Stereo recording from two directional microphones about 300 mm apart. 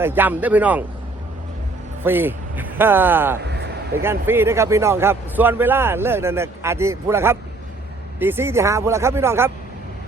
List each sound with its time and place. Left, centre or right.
0.0 s a man's voice: centre
2.0 s a man's voice: centre
3.4 s a sound: right
3.9 s a man's voice: centre